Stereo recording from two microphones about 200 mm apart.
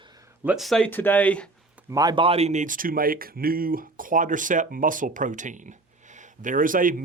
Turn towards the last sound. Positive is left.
turn(degrees=-45)  # may be behind; listen again after turning